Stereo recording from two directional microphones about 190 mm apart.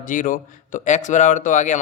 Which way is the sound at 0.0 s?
45° left (ahead or behind).